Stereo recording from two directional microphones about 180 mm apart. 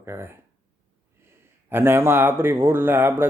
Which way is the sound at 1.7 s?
15° right (ahead or behind).